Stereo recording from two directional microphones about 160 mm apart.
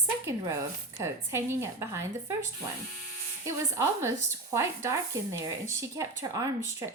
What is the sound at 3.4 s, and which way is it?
Speech, 15° right (ahead or behind).